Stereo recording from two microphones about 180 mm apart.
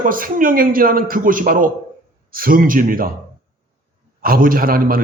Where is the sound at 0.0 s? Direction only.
50° right (ahead or behind).